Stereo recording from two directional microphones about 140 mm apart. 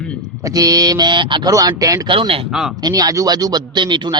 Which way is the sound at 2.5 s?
5° right (ahead or behind).